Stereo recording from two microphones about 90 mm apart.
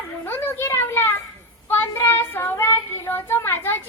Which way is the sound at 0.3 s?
25° left (ahead or behind).